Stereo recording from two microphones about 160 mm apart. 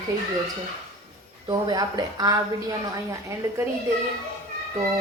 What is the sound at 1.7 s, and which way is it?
Speech, 25° right (ahead or behind).